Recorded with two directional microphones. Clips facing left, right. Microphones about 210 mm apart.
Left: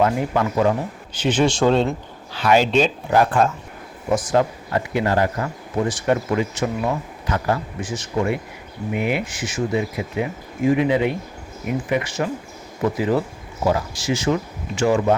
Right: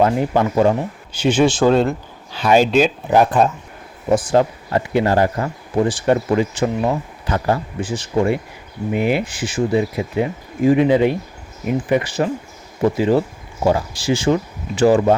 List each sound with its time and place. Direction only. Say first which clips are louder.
0.0 s speech: right 3 dB; 30° right (ahead or behind)
1.1 s speech: right 4 dB; 10° right (ahead or behind)
2.3 s speech: right 3 dB; 15° right (ahead or behind)
4.1 s speech: right 3 dB; 30° right (ahead or behind)